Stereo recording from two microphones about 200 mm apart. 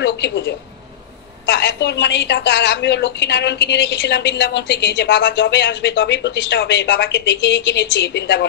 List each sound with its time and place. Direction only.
0.0 s a woman's voice: 60° left (ahead or behind)